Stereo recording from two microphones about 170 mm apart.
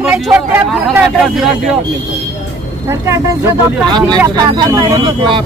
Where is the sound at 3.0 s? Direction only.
15° right (ahead or behind).